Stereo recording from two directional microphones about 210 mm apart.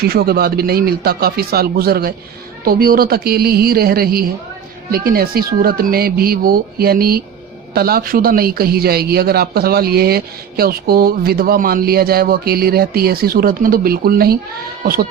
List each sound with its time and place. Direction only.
0.0 s a woman's voice: 50° right (ahead or behind)